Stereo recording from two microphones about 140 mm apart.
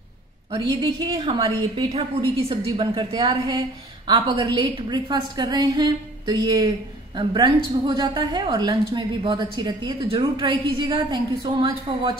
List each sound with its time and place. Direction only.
0.5 s a woman's voice: 30° right (ahead or behind)